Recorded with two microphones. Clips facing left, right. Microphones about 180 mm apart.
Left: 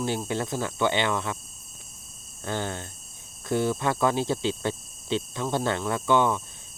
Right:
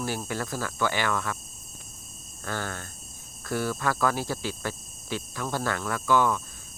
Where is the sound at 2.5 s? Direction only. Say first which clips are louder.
Left 3 dB; 20° left (ahead or behind).